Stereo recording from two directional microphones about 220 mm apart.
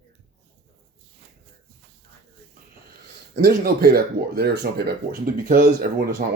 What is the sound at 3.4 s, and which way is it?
Speech, 45° right (ahead or behind).